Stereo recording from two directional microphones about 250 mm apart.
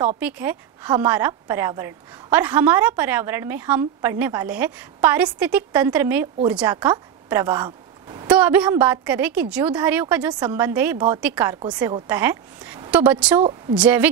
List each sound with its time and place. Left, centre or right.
0.2 s a woman's voice: centre
8.3 s a woman's voice: centre
13.4 s a woman's voice: right
13.7 s speech: centre